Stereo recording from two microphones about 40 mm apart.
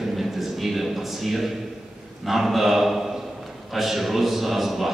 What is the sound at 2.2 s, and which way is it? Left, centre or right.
A man's voice, centre.